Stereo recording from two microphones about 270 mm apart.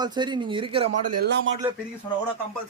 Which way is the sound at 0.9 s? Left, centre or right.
Right.